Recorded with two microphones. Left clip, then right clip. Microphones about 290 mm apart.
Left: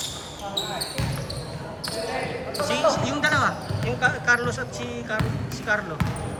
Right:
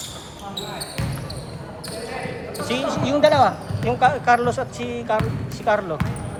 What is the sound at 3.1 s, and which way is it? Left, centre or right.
Speech, centre.